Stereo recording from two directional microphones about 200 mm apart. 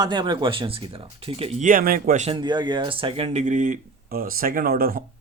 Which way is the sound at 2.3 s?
20° right (ahead or behind).